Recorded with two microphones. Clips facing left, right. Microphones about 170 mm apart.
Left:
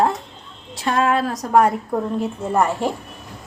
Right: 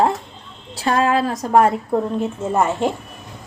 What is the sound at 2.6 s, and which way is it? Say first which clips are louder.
Speech: right 3 dB; 20° right (ahead or behind).